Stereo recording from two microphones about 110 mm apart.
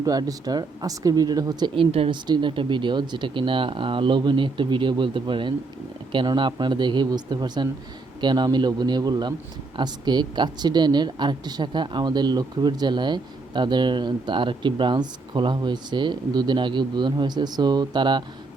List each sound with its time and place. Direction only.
0.0 s speech: 35° right (ahead or behind); by 2.1 s 55° right (ahead or behind)
2.2 s speech: 45° right (ahead or behind)